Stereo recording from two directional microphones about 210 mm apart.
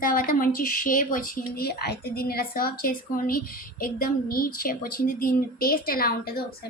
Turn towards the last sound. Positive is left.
turn(degrees=45)  # may be behind; listen again after turning